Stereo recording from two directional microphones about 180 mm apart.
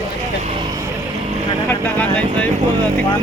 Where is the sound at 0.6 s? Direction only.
25° right (ahead or behind).